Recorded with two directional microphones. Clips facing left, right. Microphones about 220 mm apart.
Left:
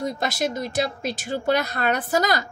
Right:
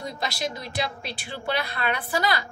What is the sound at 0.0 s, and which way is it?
Speech, 50° left (ahead or behind).